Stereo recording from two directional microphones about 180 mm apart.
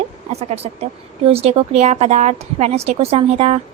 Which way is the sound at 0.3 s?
35° right (ahead or behind).